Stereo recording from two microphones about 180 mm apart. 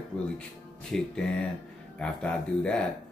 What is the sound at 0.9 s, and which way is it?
Speech, 5° left (ahead or behind).